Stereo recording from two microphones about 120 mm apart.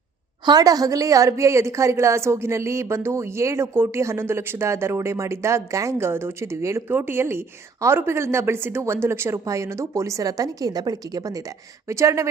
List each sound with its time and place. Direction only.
0.4 s a woman's voice: 30° right (ahead or behind)